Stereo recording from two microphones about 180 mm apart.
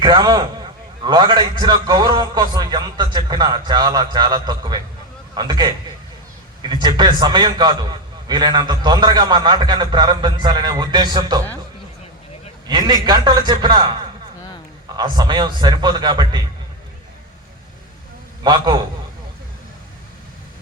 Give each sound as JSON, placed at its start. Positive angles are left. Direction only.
{"t": 0.0, "sound": "a man's voice", "side_deg": -25}
{"t": 12.6, "sound": "a man's voice", "side_deg": -25}
{"t": 14.9, "sound": "a man's voice", "side_deg": -25}
{"t": 18.4, "sound": "a man's voice", "side_deg": -25}